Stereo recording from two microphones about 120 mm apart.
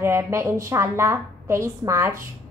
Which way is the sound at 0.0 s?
25° right (ahead or behind).